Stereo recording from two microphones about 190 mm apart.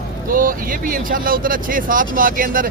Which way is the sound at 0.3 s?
45° right (ahead or behind).